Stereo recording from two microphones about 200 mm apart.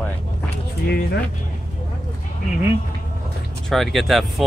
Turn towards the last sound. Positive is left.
turn(degrees=0)  # may be behind; listen again after turning